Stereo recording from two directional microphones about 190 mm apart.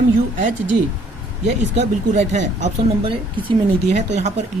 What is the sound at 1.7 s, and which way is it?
Speech, 35° right (ahead or behind).